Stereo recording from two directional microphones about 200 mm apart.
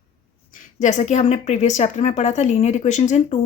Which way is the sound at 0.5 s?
40° left (ahead or behind).